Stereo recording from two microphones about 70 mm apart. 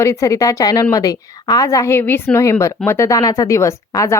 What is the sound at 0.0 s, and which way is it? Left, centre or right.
A woman's voice, left.